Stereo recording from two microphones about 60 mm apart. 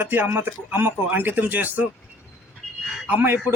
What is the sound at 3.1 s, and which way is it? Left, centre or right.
Speech, right.